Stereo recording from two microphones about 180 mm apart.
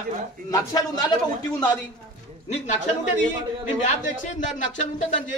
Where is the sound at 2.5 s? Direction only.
40° left (ahead or behind).